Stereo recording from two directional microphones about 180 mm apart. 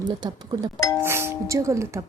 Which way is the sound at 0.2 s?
20° right (ahead or behind).